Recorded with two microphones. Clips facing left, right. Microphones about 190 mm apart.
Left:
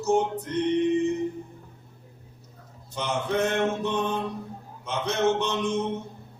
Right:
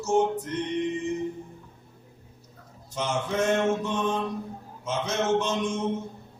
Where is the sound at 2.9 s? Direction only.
60° left (ahead or behind).